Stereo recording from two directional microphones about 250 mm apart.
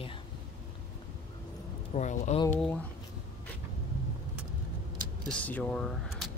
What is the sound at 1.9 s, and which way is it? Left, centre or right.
Speech, left.